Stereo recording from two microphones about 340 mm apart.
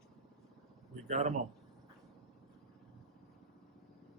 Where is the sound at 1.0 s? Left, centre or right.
Centre.